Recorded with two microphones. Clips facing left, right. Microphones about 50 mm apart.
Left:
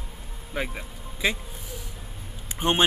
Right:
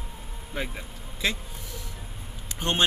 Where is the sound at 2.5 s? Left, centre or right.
Left.